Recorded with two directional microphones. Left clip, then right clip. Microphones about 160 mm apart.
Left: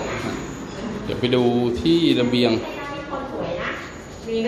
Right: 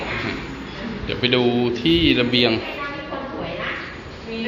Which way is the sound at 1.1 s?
20° left (ahead or behind).